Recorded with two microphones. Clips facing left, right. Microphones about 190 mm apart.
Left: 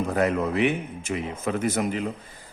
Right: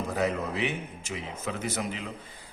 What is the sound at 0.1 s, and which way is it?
A man's voice, 55° left (ahead or behind).